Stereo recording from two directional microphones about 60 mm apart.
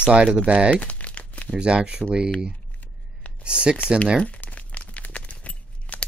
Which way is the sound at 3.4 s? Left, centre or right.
Centre.